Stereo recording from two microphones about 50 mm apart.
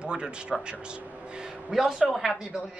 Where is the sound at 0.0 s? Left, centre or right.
Centre.